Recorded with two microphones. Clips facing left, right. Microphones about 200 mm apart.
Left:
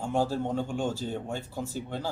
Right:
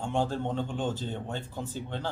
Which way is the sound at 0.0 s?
5° left (ahead or behind).